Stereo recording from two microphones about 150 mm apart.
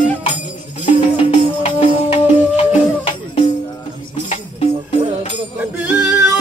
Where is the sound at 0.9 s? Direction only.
50° left (ahead or behind).